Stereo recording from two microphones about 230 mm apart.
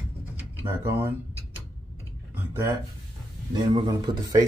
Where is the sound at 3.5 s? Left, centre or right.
Centre.